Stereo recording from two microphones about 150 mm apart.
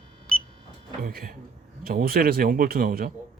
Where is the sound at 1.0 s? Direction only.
75° right (ahead or behind).